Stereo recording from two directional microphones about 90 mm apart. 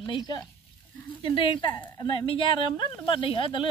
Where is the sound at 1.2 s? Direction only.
70° left (ahead or behind).